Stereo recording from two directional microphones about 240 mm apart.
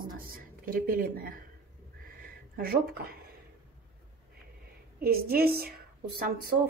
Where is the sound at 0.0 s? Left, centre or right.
Right.